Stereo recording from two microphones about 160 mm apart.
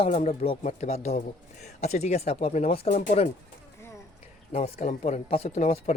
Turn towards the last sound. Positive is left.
turn(degrees=40)  # may be behind; listen again after turning